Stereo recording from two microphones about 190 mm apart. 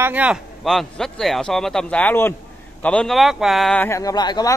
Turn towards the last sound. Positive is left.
turn(degrees=20)  # may be behind; listen again after turning